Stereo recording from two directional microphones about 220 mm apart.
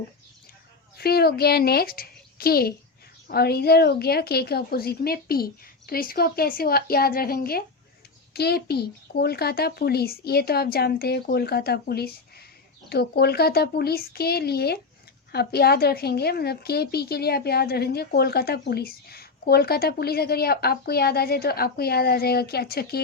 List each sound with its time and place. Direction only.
0.9 s a woman's voice: 45° left (ahead or behind)